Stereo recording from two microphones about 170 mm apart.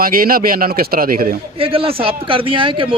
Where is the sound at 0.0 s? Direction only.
60° right (ahead or behind).